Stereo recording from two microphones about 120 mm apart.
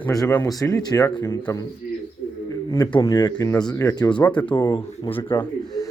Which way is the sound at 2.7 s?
35° left (ahead or behind).